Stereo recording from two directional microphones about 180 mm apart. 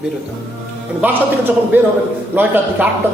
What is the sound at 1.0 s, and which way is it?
A man's voice, 10° right (ahead or behind).